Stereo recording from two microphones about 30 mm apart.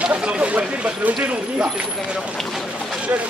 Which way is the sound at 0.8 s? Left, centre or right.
Right.